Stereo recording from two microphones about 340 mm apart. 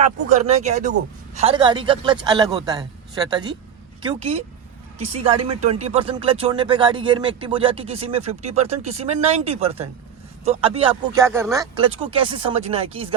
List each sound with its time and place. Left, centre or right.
0.3 s speech: centre